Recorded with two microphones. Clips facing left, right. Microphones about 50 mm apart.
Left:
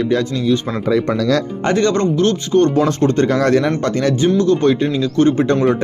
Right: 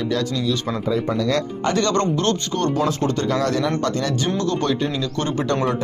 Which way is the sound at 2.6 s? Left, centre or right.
Left.